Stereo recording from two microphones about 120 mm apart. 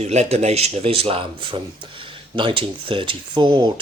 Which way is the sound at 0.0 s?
65° right (ahead or behind).